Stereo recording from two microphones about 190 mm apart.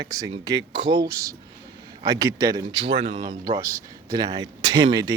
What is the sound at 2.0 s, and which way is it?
Speech, 20° right (ahead or behind).